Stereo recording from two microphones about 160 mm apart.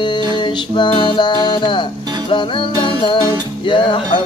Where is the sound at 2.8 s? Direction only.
30° left (ahead or behind).